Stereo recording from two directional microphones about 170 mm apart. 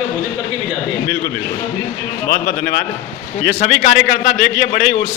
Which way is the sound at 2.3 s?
60° left (ahead or behind).